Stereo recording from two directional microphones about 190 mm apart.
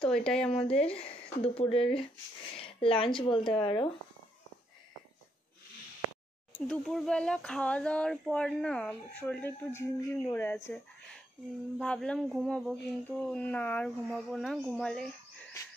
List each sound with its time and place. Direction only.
0.1 s speech: 5° left (ahead or behind)
0.7 s speech: 30° left (ahead or behind)
2.5 s a sound: 30° left (ahead or behind)
3.2 s speech: 25° left (ahead or behind)
6.5 s speech: 5° left (ahead or behind)
11.8 s speech: 5° left (ahead or behind)